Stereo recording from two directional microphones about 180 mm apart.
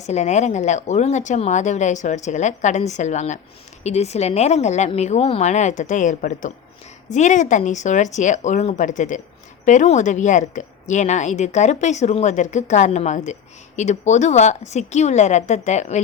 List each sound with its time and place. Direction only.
0.1 s a woman's voice: 40° left (ahead or behind)